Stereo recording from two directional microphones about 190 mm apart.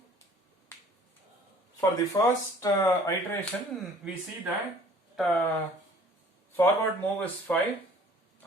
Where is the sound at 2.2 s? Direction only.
20° left (ahead or behind).